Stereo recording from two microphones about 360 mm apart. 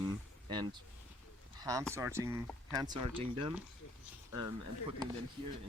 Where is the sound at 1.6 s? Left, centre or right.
Centre.